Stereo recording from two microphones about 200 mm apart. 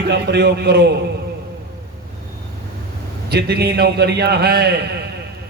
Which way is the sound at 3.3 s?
55° right (ahead or behind).